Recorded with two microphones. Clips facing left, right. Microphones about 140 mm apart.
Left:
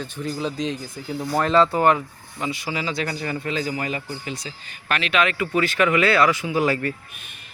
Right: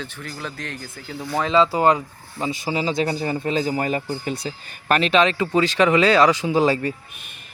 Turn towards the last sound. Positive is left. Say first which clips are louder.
# right 3 dB
turn(degrees=-20)  # may be behind; listen again after turning